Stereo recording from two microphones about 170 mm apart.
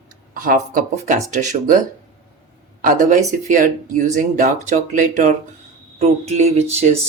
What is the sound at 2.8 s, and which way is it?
Speech, 50° right (ahead or behind).